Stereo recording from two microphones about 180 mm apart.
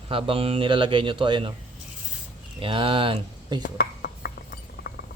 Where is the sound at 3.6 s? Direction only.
60° left (ahead or behind).